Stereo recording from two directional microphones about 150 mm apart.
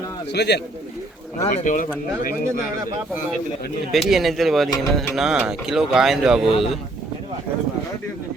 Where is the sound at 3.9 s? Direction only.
Centre (ahead or behind).